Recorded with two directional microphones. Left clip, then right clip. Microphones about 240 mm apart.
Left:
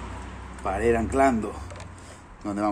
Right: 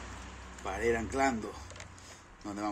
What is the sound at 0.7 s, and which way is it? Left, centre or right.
Speech, centre.